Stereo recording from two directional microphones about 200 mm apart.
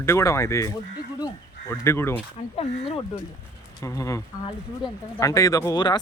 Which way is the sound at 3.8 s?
15° left (ahead or behind).